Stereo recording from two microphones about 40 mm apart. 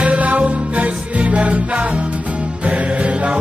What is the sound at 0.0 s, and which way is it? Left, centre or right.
Music, right.